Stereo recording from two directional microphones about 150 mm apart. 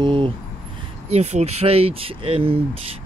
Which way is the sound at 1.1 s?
45° right (ahead or behind).